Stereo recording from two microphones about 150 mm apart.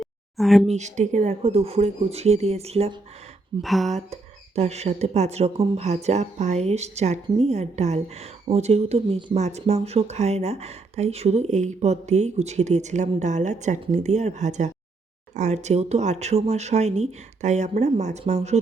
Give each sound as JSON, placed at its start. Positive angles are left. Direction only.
{"t": 0.0, "sound": "a sound", "side_deg": 0}
{"t": 0.7, "sound": "speech", "side_deg": -50}
{"t": 3.6, "sound": "speech", "side_deg": 0}
{"t": 3.9, "sound": "speech", "side_deg": -45}